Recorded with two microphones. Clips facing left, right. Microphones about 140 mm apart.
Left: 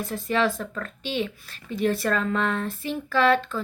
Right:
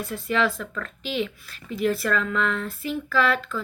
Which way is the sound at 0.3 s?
35° left (ahead or behind).